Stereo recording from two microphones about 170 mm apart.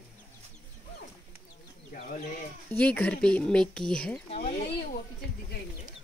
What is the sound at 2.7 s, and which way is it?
Speech, 10° left (ahead or behind).